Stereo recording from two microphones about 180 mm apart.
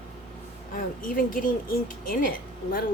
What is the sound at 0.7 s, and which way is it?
Speech, 50° left (ahead or behind).